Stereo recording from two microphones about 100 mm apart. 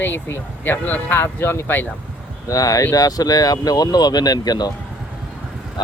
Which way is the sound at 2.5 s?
35° left (ahead or behind).